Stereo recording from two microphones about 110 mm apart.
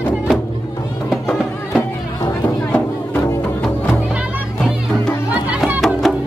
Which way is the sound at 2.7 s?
20° left (ahead or behind).